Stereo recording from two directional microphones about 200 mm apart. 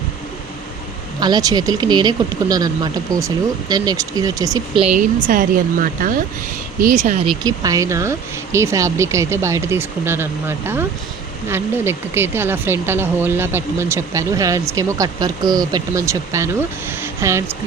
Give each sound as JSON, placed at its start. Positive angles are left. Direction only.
{"t": 1.2, "sound": "speech", "side_deg": -20}
{"t": 4.9, "sound": "speech", "side_deg": -40}
{"t": 7.3, "sound": "speech", "side_deg": -20}
{"t": 11.4, "sound": "speech", "side_deg": -10}